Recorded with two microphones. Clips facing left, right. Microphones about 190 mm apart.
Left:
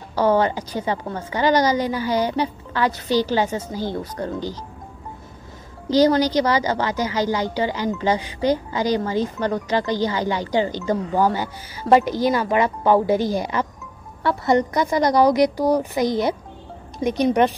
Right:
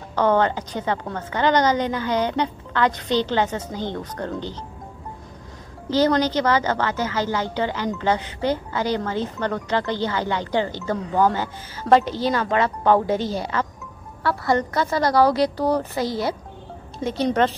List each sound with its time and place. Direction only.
0.1 s a woman's voice: 10° left (ahead or behind)
5.9 s a woman's voice: 15° left (ahead or behind)